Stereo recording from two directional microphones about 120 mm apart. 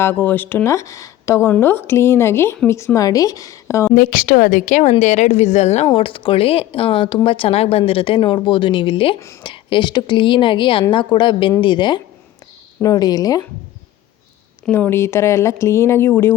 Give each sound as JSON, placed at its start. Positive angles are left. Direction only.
{"t": 0.0, "sound": "speech", "side_deg": 15}
{"t": 4.5, "sound": "speech", "side_deg": 90}
{"t": 5.9, "sound": "a woman's voice", "side_deg": 45}
{"t": 14.7, "sound": "speech", "side_deg": 20}